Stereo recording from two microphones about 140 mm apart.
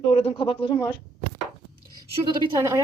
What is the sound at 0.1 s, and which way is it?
Speech, 45° left (ahead or behind).